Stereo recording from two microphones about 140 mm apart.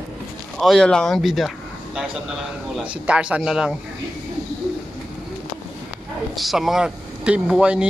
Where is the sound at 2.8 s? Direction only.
10° right (ahead or behind).